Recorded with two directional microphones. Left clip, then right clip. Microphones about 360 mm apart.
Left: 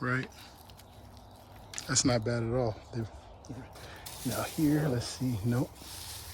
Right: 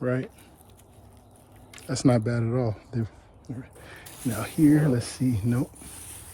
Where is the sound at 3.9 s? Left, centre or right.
Right.